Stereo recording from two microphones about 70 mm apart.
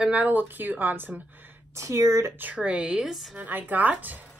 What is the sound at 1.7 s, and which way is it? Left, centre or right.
Speech, right.